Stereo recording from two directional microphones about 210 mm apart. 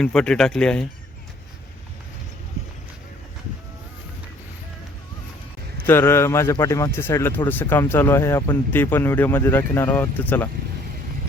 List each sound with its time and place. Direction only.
0.0 s speech: 5° left (ahead or behind)
5.7 s speech: 10° left (ahead or behind)